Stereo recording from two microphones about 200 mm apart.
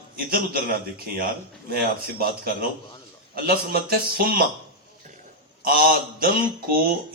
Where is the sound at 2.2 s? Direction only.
50° right (ahead or behind).